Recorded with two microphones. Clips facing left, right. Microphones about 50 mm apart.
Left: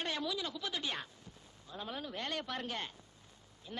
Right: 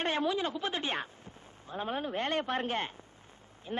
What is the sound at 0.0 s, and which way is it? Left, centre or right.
A woman's voice, right.